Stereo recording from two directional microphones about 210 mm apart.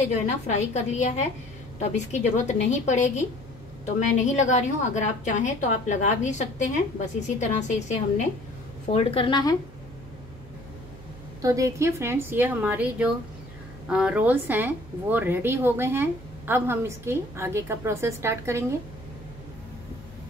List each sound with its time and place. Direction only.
0.5 s a woman's voice: 35° left (ahead or behind)
11.4 s a woman's voice: 15° right (ahead or behind)